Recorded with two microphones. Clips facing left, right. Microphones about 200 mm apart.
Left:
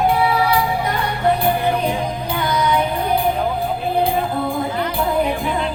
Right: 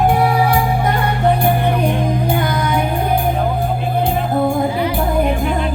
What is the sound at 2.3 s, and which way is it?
Music, 50° right (ahead or behind).